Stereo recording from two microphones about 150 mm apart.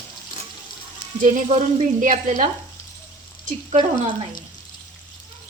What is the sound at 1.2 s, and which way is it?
Speech, 55° right (ahead or behind).